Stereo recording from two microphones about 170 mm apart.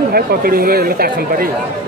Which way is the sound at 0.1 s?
60° right (ahead or behind).